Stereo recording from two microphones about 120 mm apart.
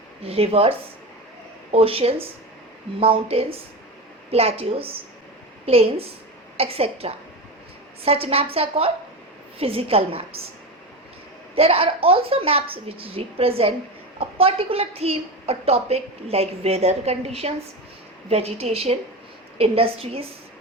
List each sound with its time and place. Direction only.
0.2 s a woman's voice: 55° right (ahead or behind)
1.7 s a woman's voice: 50° right (ahead or behind)
11.5 s a woman's voice: 55° right (ahead or behind)